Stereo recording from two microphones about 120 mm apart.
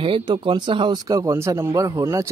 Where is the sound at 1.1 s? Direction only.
25° right (ahead or behind).